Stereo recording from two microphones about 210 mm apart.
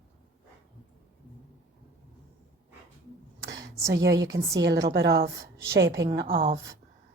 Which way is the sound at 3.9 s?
50° right (ahead or behind).